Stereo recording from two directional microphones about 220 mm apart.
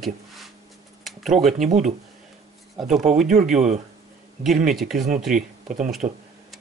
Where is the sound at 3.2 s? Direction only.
35° right (ahead or behind).